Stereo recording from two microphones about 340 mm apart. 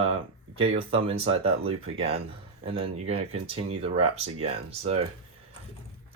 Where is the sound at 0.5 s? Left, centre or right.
Centre.